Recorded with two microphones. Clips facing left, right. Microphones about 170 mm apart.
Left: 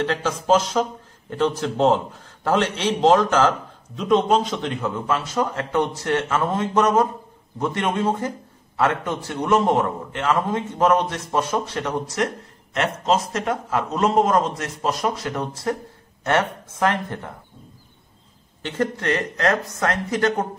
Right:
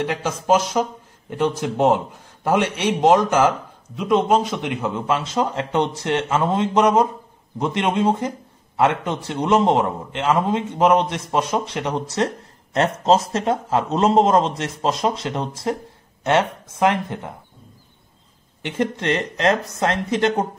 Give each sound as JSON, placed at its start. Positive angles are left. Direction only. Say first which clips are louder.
{"t": 0.0, "sound": "a man's voice", "louder": "even", "side_deg": -10}
{"t": 12.7, "sound": "a man's voice", "louder": "right 4 dB", "side_deg": -30}
{"t": 18.6, "sound": "a man's voice", "louder": "right 1 dB", "side_deg": -20}